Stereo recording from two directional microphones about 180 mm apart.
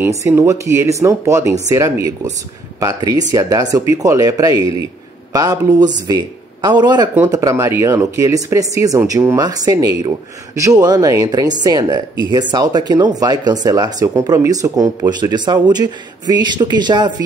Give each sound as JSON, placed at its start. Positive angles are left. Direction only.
{"t": 0.2, "sound": "speech", "side_deg": -15}